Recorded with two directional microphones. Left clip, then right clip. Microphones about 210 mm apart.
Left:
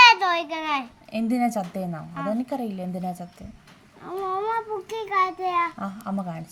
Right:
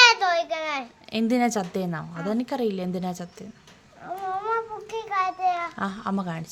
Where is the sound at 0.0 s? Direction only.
20° right (ahead or behind).